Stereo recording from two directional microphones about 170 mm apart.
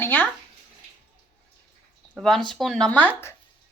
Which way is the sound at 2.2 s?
Centre (ahead or behind).